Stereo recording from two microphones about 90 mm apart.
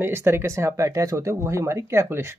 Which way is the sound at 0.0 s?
25° right (ahead or behind).